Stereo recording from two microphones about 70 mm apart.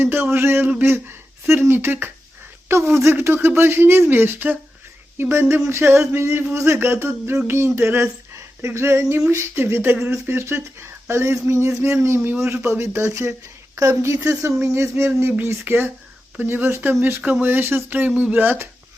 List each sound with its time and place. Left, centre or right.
0.0 s speech: right
7.4 s a sound: right
9.3 s speech: right
14.6 s speech: right